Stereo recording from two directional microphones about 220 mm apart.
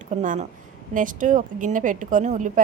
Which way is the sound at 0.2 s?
35° right (ahead or behind).